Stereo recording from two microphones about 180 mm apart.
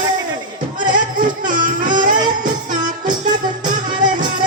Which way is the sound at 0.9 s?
50° right (ahead or behind).